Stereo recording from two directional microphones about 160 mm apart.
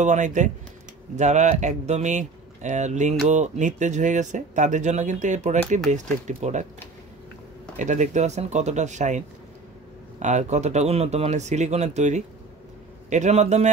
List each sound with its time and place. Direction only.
0.0 s speech: 50° right (ahead or behind)
7.8 s speech: 50° right (ahead or behind)